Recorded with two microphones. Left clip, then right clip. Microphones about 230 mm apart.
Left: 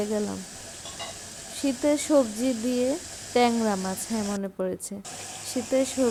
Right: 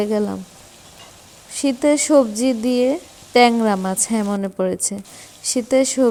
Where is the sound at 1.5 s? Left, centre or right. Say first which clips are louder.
Right 8 dB; right.